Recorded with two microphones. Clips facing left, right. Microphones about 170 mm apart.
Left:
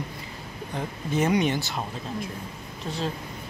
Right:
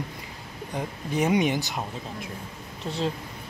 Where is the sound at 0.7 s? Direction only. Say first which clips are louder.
Left 1 dB; 15° right (ahead or behind).